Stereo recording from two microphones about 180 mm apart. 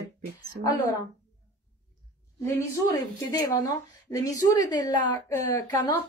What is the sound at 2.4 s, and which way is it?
Speech, 20° left (ahead or behind).